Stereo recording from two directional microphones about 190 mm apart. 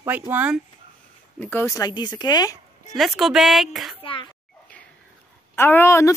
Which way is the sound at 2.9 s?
Centre (ahead or behind).